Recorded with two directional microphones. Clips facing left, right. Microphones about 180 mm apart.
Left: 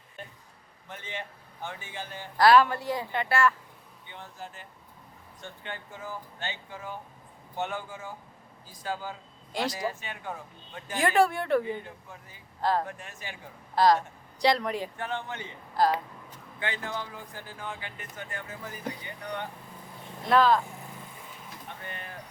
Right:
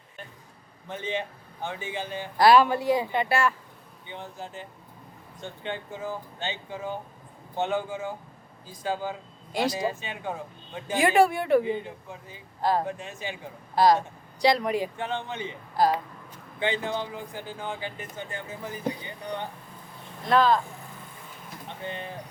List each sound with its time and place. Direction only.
0.9 s speech: 25° right (ahead or behind)
9.5 s speech: 5° right (ahead or behind)
9.7 s speech: 20° right (ahead or behind)
10.9 s speech: 10° right (ahead or behind)
11.6 s speech: 20° right (ahead or behind)
13.7 s speech: 10° right (ahead or behind)
14.9 s speech: 20° right (ahead or behind)
15.8 s speech: 10° right (ahead or behind)
16.6 s speech: 25° right (ahead or behind)
20.2 s speech: 5° left (ahead or behind)
21.7 s speech: 25° right (ahead or behind)